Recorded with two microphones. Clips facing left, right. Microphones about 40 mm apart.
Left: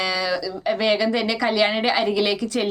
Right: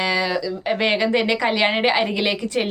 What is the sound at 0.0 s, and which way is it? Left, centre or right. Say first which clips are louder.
Speech: right 2 dB; right.